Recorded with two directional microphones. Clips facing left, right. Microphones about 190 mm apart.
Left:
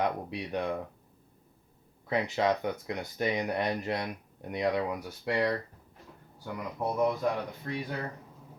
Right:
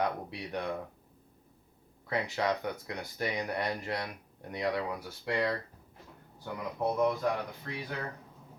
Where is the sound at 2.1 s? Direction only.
20° left (ahead or behind).